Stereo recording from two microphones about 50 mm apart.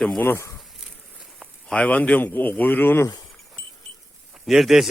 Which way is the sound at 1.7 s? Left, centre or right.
Left.